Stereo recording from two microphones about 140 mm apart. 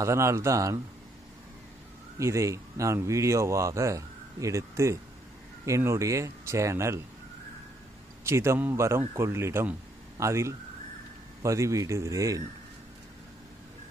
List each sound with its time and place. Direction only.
0.0 s speech: 20° right (ahead or behind)
2.1 s speech: 20° right (ahead or behind)
8.2 s speech: 20° right (ahead or behind)